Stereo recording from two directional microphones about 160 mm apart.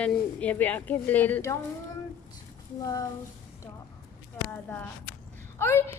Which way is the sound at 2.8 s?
20° left (ahead or behind).